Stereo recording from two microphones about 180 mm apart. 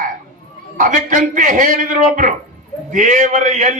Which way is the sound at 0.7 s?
45° right (ahead or behind).